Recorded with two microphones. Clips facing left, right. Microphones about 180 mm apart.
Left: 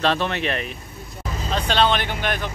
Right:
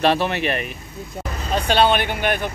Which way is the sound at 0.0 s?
10° right (ahead or behind).